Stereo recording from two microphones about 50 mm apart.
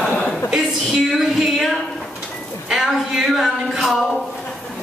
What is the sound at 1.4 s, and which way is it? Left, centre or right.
A woman's voice, centre.